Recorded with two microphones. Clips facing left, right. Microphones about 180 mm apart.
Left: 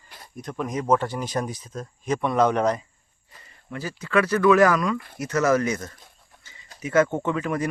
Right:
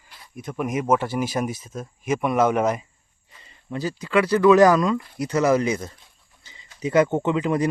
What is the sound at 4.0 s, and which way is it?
Speech, 15° right (ahead or behind).